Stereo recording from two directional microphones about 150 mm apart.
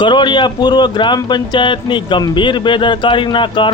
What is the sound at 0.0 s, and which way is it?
Speech, 30° left (ahead or behind).